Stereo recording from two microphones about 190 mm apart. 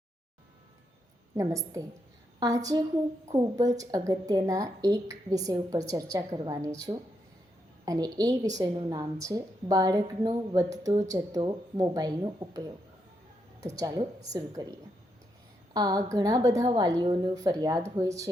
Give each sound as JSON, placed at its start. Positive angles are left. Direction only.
{"t": 1.4, "sound": "a woman's voice", "side_deg": -15}
{"t": 3.3, "sound": "a woman's voice", "side_deg": -20}
{"t": 13.7, "sound": "a woman's voice", "side_deg": -20}
{"t": 15.7, "sound": "a woman's voice", "side_deg": -20}